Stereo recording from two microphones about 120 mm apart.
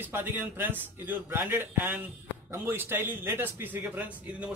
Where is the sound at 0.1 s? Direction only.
20° right (ahead or behind).